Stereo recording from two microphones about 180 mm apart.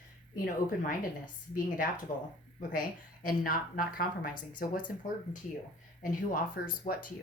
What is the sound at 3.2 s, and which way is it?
A woman's voice, 55° left (ahead or behind).